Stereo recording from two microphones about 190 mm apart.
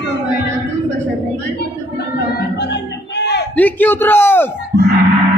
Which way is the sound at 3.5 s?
10° left (ahead or behind).